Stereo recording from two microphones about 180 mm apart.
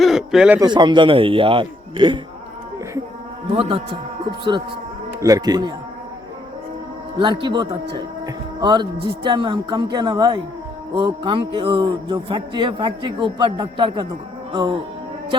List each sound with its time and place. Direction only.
0.0 s speech: centre (ahead or behind)
0.6 s a man's voice: 25° right (ahead or behind)
3.5 s a man's voice: 30° right (ahead or behind)
5.2 s a man's voice: 20° right (ahead or behind)
7.2 s a man's voice: 25° right (ahead or behind)